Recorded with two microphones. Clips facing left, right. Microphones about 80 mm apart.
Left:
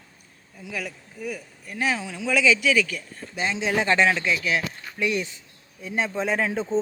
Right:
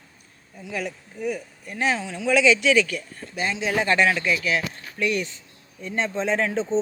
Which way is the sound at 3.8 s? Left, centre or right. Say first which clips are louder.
Even; centre.